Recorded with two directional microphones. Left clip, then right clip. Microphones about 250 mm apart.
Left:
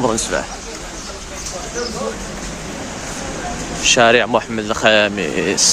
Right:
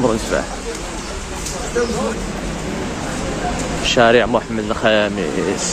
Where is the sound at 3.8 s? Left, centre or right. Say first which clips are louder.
Left 1 dB; centre.